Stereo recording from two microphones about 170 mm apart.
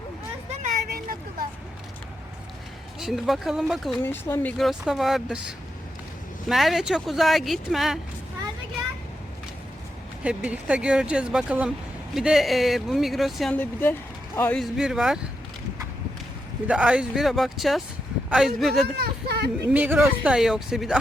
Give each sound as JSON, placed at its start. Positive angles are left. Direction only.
{"t": 0.6, "sound": "vehicle", "side_deg": -50}
{"t": 3.0, "sound": "speech", "side_deg": 0}
{"t": 4.0, "sound": "speech", "side_deg": 15}
{"t": 4.5, "sound": "speech", "side_deg": 0}
{"t": 10.2, "sound": "speech", "side_deg": -5}
{"t": 14.3, "sound": "speech", "side_deg": 10}
{"t": 14.6, "sound": "speech", "side_deg": -5}
{"t": 16.6, "sound": "speech", "side_deg": -5}
{"t": 18.7, "sound": "speech", "side_deg": -70}
{"t": 19.7, "sound": "speech", "side_deg": -10}